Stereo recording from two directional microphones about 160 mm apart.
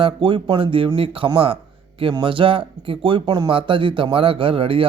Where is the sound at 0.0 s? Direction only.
30° right (ahead or behind).